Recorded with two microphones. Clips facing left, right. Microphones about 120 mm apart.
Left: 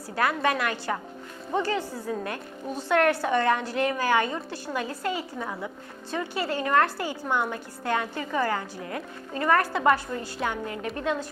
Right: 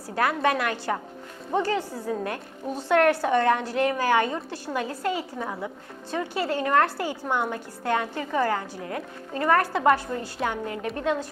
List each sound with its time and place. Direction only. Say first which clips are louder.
0.2 s a woman's voice: right 1 dB; 50° right (ahead or behind)